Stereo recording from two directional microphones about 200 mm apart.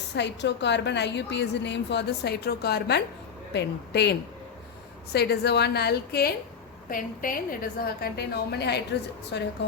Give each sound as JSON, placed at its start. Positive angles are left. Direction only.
{"t": 0.2, "sound": "a woman's voice", "side_deg": 60}